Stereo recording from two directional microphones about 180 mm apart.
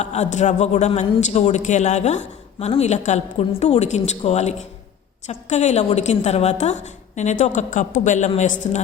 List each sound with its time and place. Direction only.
0.0 s a man's voice: 40° left (ahead or behind)